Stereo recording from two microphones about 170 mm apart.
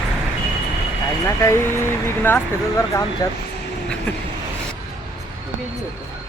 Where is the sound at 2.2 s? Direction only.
15° left (ahead or behind).